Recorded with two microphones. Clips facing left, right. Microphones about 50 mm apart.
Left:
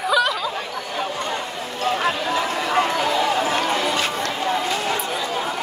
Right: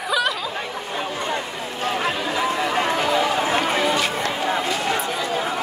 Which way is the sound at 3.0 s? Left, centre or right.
Centre.